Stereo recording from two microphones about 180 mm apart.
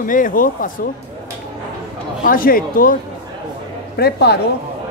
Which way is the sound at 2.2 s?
50° left (ahead or behind).